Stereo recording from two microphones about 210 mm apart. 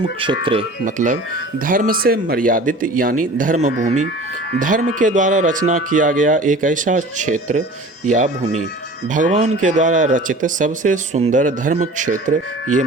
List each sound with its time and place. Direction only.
0.9 s speech: 40° right (ahead or behind)